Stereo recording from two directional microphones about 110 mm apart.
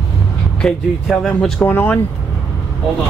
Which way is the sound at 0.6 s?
5° left (ahead or behind).